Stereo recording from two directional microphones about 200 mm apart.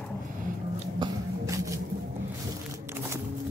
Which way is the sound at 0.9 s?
15° right (ahead or behind).